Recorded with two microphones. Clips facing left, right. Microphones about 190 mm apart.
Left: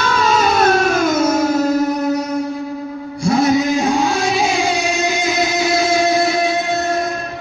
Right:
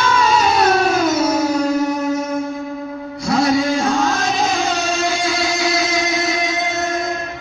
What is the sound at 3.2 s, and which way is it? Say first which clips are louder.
Music: left 2 dB; 25° left (ahead or behind).